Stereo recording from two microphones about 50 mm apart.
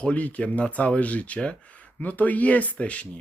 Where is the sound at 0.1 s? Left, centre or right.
Left.